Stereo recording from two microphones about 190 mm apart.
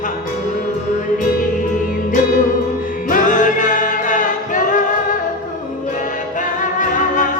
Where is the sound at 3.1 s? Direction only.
40° left (ahead or behind).